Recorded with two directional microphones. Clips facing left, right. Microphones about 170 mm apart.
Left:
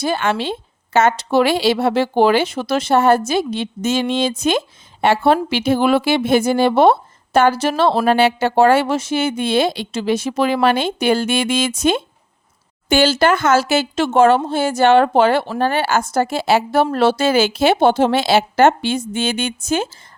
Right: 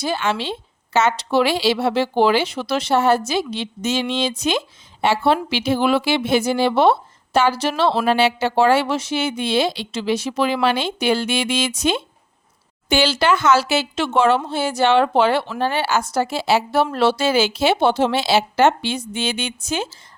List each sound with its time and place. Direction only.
0.0 s speech: 55° left (ahead or behind)